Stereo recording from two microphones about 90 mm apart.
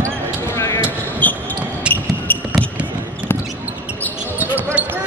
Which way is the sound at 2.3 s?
20° left (ahead or behind).